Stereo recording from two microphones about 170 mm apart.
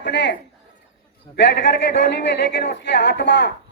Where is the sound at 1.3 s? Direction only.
75° left (ahead or behind).